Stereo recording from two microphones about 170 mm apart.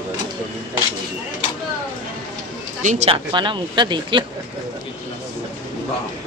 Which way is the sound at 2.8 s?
45° right (ahead or behind).